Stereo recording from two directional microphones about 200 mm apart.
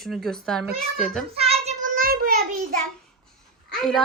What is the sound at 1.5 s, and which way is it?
Child singing, 35° right (ahead or behind).